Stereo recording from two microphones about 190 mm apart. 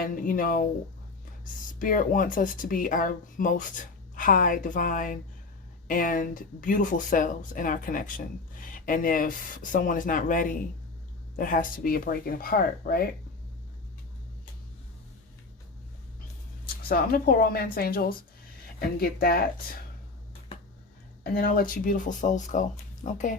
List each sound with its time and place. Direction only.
0.0 s speech: 45° left (ahead or behind)
1.8 s speech: 45° left (ahead or behind)
16.6 s speech: 50° left (ahead or behind)
21.3 s speech: 50° left (ahead or behind)